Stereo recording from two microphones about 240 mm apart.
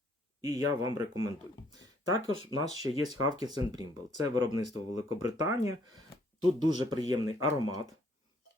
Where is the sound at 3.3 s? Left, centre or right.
Centre.